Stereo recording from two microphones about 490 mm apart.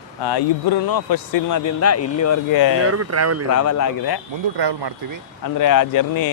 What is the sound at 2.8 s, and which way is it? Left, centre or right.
Speech, right.